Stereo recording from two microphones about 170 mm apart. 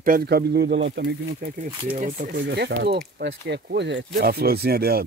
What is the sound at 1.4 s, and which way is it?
Speech, 65° right (ahead or behind).